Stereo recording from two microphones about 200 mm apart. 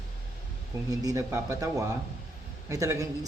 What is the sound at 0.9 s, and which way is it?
A man's voice, 15° right (ahead or behind).